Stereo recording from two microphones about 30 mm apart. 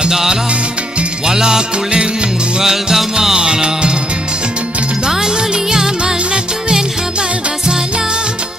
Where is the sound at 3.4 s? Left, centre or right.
Right.